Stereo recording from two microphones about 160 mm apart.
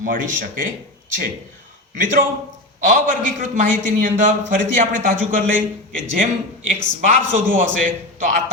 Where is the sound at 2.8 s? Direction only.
55° right (ahead or behind).